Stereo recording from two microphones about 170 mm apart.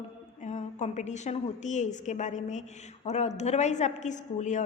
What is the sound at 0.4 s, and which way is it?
A woman's voice, 45° left (ahead or behind).